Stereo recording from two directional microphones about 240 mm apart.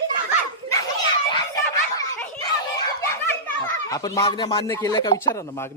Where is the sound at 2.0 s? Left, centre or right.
Centre.